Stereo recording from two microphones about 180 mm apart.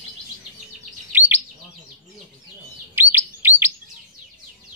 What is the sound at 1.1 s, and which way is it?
Chirp, 10° right (ahead or behind).